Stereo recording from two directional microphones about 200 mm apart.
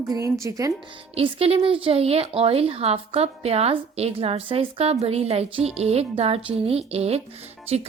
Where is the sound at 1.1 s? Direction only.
30° right (ahead or behind).